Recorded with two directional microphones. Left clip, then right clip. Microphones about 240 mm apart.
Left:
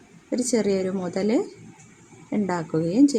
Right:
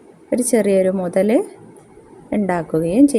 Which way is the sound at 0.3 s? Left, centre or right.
Centre.